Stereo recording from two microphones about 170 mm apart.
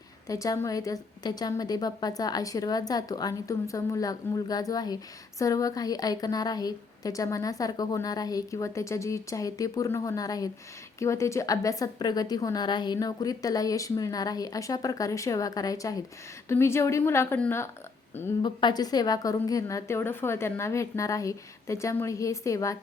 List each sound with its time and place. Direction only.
0.3 s a woman's voice: 20° left (ahead or behind)
18.4 s a woman's voice: 25° left (ahead or behind)